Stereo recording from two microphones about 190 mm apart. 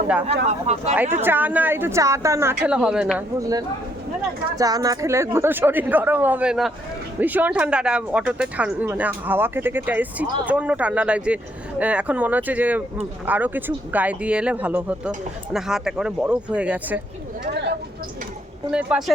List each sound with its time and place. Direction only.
0.7 s speech: 35° right (ahead or behind)
1.1 s speech: 10° right (ahead or behind)
4.5 s speech: 20° right (ahead or behind)
17.4 s a sound: 60° right (ahead or behind)
18.7 s speech: 5° right (ahead or behind)